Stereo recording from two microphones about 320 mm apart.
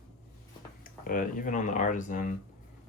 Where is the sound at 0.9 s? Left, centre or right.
Left.